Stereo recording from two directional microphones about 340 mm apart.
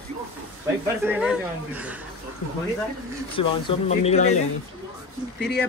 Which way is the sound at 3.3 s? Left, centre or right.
Centre.